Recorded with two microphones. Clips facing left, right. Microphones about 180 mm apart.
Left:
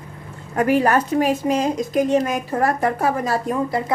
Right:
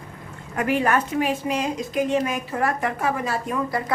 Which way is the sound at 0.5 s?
35° left (ahead or behind).